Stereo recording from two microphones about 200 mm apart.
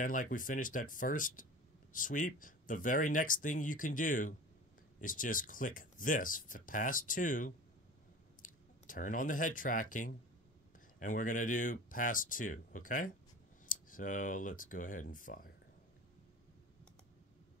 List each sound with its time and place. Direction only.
0.0 s speech: 40° left (ahead or behind)